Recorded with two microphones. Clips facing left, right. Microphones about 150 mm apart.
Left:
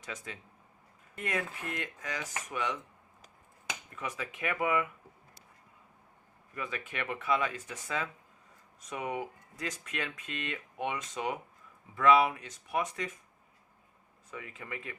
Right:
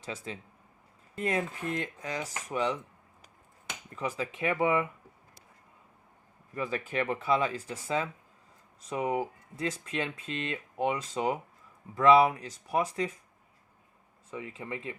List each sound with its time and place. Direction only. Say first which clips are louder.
0.0 s speech: right 4 dB; 30° right (ahead or behind)
3.9 s speech: right 7 dB; 30° right (ahead or behind)
6.5 s speech: right 6 dB; 35° right (ahead or behind)
14.3 s speech: right 5 dB; 25° right (ahead or behind)